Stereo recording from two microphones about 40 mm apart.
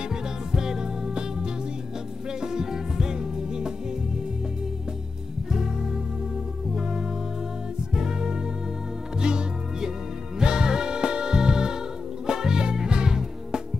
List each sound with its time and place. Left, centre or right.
0.1 s music: centre
5.5 s music: centre